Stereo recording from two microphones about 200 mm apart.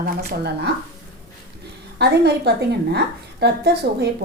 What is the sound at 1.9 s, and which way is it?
A woman's voice, 55° right (ahead or behind).